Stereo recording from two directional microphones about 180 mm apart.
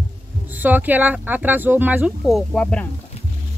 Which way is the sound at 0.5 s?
10° right (ahead or behind).